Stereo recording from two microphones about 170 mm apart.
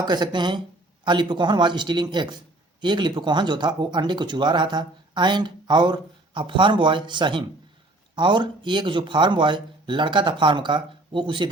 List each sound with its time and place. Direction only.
0.0 s speech: 25° right (ahead or behind)